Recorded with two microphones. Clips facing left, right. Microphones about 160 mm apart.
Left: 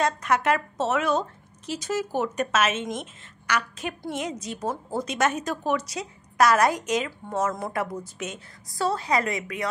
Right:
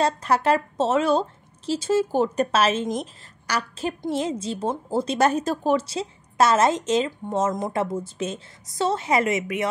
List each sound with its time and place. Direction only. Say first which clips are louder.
0.0 s a woman's voice: right 2 dB; 30° right (ahead or behind)